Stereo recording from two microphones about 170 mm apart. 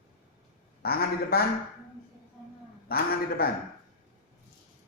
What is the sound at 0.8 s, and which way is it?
Speech, 65° left (ahead or behind).